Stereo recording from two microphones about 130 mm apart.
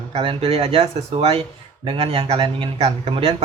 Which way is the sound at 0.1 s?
45° right (ahead or behind).